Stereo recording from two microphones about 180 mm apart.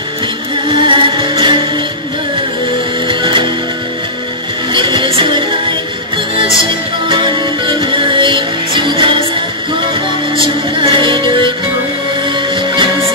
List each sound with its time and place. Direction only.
0.7 s music: 25° right (ahead or behind)
3.1 s music: 25° right (ahead or behind)
4.7 s music: 25° right (ahead or behind)
10.3 s music: 30° right (ahead or behind)